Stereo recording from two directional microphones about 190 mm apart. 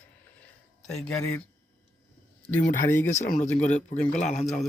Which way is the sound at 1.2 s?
15° left (ahead or behind).